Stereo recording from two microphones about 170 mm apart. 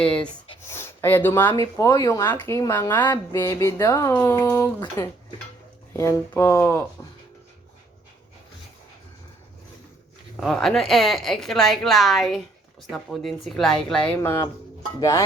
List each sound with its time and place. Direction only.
0.0 s speech: 5° left (ahead or behind)
10.4 s a woman's voice: centre (ahead or behind)
14.2 s speech: 15° left (ahead or behind)